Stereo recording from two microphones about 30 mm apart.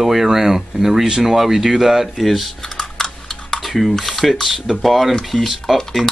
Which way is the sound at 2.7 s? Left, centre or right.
Left.